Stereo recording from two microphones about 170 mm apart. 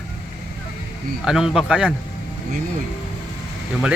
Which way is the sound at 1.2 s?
5° right (ahead or behind).